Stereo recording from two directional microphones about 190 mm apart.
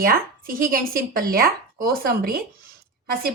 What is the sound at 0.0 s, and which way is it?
A woman's voice, 50° right (ahead or behind).